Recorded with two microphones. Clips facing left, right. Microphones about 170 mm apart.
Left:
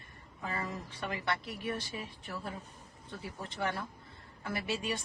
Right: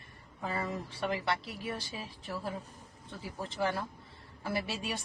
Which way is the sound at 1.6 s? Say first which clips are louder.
Left 1 dB; 25° right (ahead or behind).